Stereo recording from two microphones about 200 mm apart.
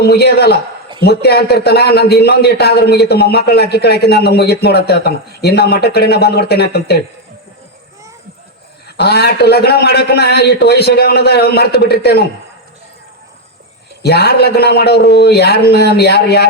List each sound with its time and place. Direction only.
0.0 s a man's voice: 55° left (ahead or behind)
9.0 s a man's voice: 55° left (ahead or behind)
14.0 s a man's voice: 55° left (ahead or behind)